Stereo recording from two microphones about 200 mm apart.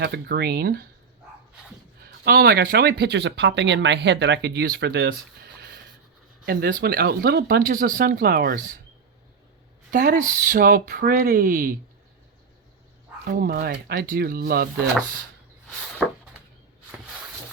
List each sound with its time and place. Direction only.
0.0 s speech: 55° right (ahead or behind)
2.0 s speech: 50° right (ahead or behind)
5.5 s a sound: 55° right (ahead or behind)
6.4 s speech: 50° right (ahead or behind)
9.9 s speech: 45° right (ahead or behind)
13.4 s speech: 50° right (ahead or behind)
16.0 s a sound: centre (ahead or behind)